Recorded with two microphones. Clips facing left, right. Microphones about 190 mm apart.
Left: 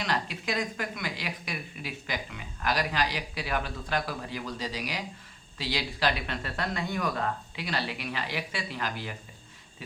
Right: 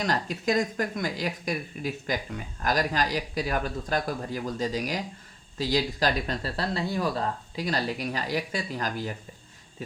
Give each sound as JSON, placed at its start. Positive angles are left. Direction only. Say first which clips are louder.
{"t": 0.0, "sound": "a woman's voice", "louder": "right 4 dB", "side_deg": -40}